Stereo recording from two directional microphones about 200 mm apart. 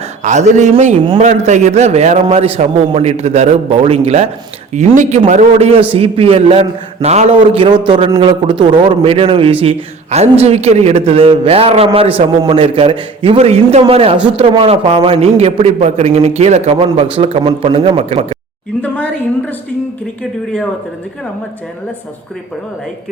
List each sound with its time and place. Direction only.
0.2 s a man's voice: 35° right (ahead or behind)
18.8 s a woman's voice: 5° left (ahead or behind)